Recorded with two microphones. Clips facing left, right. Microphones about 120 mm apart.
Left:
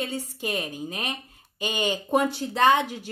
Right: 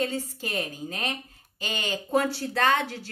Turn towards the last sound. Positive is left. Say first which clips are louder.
# left 4 dB
turn(degrees=15)  # may be behind; listen again after turning